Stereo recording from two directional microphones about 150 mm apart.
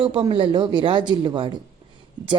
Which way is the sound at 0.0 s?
35° right (ahead or behind).